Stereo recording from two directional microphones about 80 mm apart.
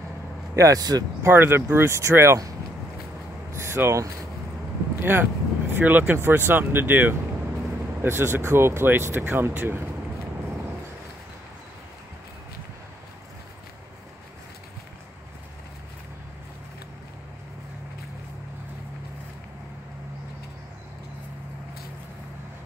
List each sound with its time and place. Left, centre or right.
0.6 s speech: right
1.2 s speech: right
3.5 s a sound: right
5.0 s speech: right